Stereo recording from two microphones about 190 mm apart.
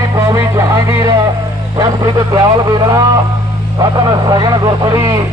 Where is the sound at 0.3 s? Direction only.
15° right (ahead or behind).